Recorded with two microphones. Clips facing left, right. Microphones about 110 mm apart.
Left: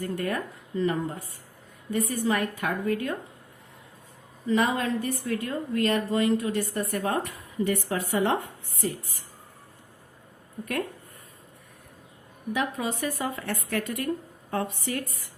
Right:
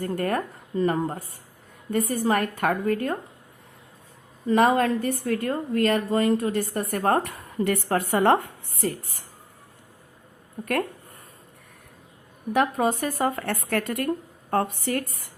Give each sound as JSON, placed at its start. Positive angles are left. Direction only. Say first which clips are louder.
{"t": 0.0, "sound": "a woman's voice", "louder": "right 4 dB", "side_deg": -45}
{"t": 4.4, "sound": "a woman's voice", "louder": "right 5 dB", "side_deg": -50}
{"t": 12.5, "sound": "a woman's voice", "louder": "right 7 dB", "side_deg": -50}